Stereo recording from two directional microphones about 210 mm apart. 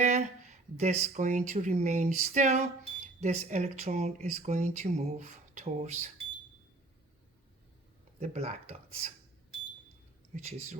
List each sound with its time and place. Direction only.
0.0 s a sound: 35° right (ahead or behind)
1.1 s speech: 35° right (ahead or behind)
8.2 s speech: 30° right (ahead or behind)
10.3 s speech: 35° right (ahead or behind)